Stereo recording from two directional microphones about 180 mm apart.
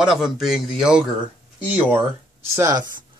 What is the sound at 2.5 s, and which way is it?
Speech, 20° right (ahead or behind).